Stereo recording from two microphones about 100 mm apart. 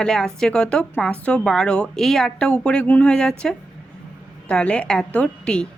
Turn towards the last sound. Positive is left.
turn(degrees=10)  # may be behind; listen again after turning